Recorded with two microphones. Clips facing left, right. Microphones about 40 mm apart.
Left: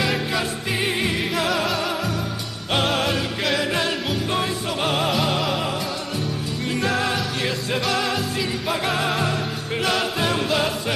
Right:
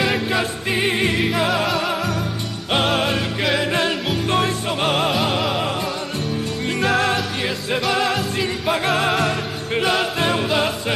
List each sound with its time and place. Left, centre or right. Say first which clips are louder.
0.0 s music: right 3 dB; centre
7.2 s music: right 1 dB; centre